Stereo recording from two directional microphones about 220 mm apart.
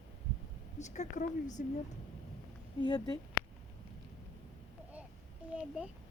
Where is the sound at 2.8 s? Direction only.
20° left (ahead or behind).